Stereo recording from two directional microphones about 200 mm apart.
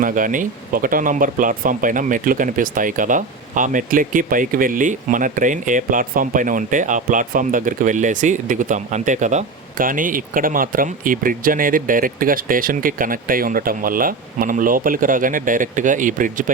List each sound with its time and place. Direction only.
0.0 s speech: 40° right (ahead or behind)